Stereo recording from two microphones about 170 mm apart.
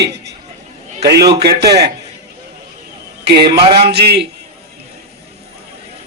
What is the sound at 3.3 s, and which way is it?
A man's voice, 75° right (ahead or behind).